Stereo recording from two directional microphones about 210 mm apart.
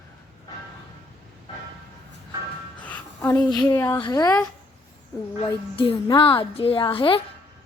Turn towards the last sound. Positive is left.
turn(degrees=25)  # may be behind; listen again after turning